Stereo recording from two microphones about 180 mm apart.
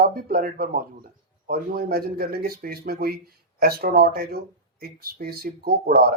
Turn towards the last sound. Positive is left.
turn(degrees=-60)  # may be behind; listen again after turning